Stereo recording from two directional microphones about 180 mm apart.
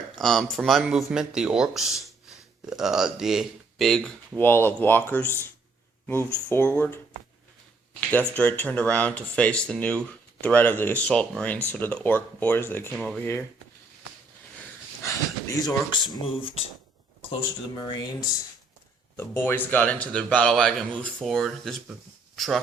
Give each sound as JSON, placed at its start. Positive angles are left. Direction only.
{"t": 0.2, "sound": "a man's voice", "side_deg": 0}
{"t": 6.5, "sound": "speech", "side_deg": 10}
{"t": 8.3, "sound": "a man's voice", "side_deg": 10}
{"t": 15.0, "sound": "speech", "side_deg": 20}
{"t": 17.7, "sound": "speech", "side_deg": 20}
{"t": 19.1, "sound": "a man's voice", "side_deg": 10}